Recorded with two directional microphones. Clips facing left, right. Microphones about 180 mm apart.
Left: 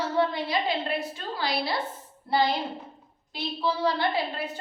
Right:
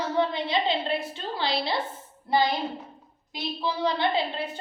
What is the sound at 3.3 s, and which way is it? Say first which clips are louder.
A woman's voice: left 1 dB; 20° right (ahead or behind).